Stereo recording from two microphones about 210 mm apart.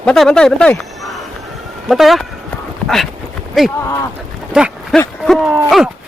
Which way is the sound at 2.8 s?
5° left (ahead or behind).